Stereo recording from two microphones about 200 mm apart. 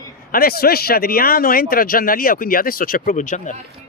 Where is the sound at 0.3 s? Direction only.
50° left (ahead or behind).